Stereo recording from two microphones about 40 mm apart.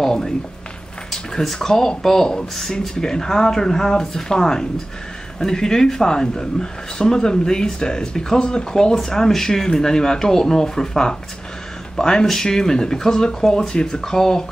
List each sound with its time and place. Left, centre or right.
0.0 s a sound: centre
1.1 s speech: centre
8.9 s speech: centre